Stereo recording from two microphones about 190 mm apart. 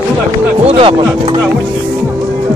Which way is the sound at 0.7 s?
30° right (ahead or behind).